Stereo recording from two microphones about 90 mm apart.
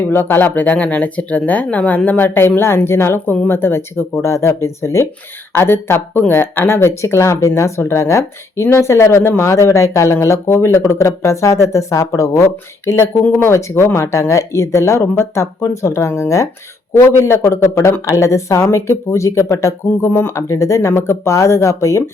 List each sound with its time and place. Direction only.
0.0 s speech: 25° left (ahead or behind)